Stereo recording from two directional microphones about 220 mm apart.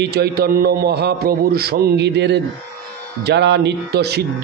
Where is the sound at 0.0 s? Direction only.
45° right (ahead or behind).